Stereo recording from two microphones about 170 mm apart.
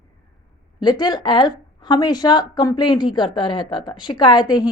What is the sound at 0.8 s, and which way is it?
Speech, 25° left (ahead or behind).